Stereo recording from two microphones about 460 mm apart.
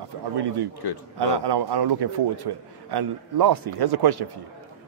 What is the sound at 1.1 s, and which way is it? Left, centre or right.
A man's voice, right.